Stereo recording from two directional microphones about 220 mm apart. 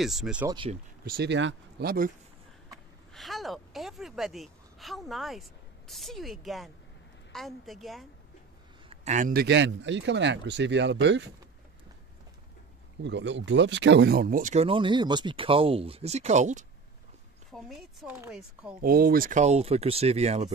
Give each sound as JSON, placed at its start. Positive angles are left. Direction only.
{"t": 0.0, "sound": "a woman's voice", "side_deg": 0}
{"t": 0.5, "sound": "speech", "side_deg": -20}
{"t": 1.0, "sound": "a man's voice", "side_deg": -45}
{"t": 3.1, "sound": "a woman's voice", "side_deg": 0}
{"t": 8.8, "sound": "a man's voice", "side_deg": -30}
{"t": 13.0, "sound": "speech", "side_deg": -55}
{"t": 17.5, "sound": "a woman's voice", "side_deg": 0}
{"t": 18.8, "sound": "speech", "side_deg": -40}